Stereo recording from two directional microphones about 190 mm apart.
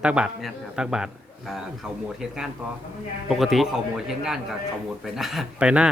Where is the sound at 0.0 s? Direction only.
5° right (ahead or behind).